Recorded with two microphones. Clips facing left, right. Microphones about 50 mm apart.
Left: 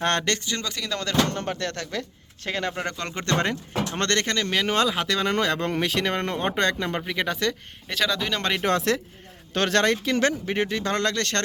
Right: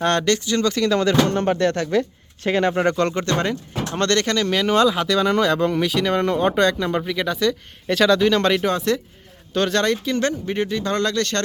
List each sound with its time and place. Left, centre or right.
0.0 s speech: left
0.6 s speech: centre
1.3 s speech: right
3.2 s speech: left
6.1 s speech: left
7.9 s speech: centre
8.4 s speech: centre
8.6 s speech: left